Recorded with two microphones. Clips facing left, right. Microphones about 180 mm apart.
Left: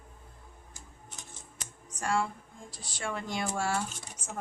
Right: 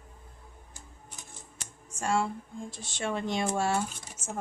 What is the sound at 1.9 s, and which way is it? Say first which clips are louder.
Speech: right 2 dB; 25° right (ahead or behind).